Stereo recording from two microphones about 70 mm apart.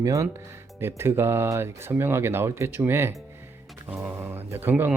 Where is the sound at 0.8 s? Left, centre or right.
Right.